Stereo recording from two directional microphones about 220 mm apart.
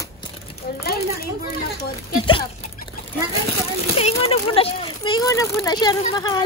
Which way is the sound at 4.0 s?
30° left (ahead or behind).